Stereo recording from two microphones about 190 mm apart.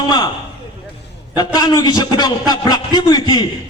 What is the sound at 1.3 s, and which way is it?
A man's voice, 20° left (ahead or behind).